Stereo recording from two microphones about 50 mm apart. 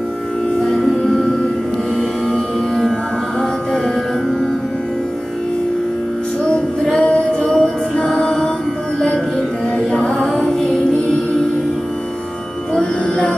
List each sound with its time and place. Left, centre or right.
0.6 s music: centre
6.5 s music: centre
10.1 s music: centre